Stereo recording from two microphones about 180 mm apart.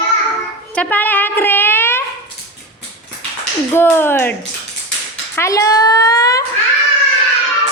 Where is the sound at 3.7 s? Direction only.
10° left (ahead or behind).